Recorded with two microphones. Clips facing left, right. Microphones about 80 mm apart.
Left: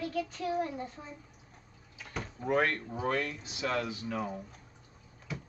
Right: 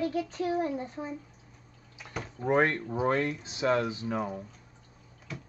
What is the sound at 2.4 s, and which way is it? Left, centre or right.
Speech, right.